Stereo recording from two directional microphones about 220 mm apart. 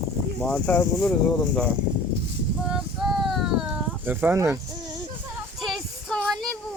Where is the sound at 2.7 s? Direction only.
Centre (ahead or behind).